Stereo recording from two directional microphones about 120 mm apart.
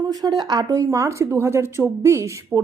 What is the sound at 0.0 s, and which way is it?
A woman's voice, 35° right (ahead or behind).